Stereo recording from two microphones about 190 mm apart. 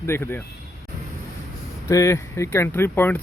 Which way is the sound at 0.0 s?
10° left (ahead or behind).